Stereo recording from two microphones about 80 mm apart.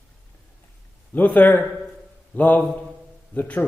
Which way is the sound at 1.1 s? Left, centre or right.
Left.